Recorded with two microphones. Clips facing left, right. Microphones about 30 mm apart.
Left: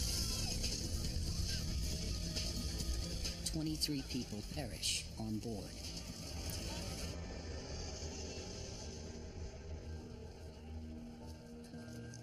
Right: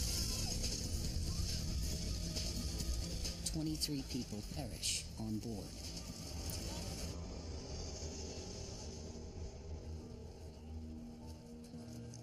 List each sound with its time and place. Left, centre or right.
0.0 s music: centre
6.6 s vehicle: left